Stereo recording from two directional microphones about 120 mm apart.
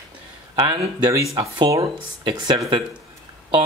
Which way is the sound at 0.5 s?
40° right (ahead or behind).